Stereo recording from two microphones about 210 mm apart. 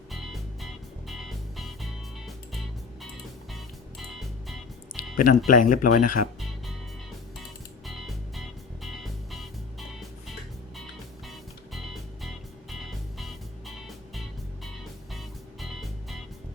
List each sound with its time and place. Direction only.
0.1 s music: centre (ahead or behind)
4.9 s music: 40° left (ahead or behind)
5.5 s speech: 40° left (ahead or behind)
7.9 s music: centre (ahead or behind)
12.7 s music: centre (ahead or behind)
15.6 s music: centre (ahead or behind)